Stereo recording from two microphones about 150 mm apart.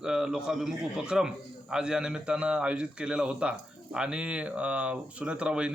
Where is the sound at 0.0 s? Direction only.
5° right (ahead or behind).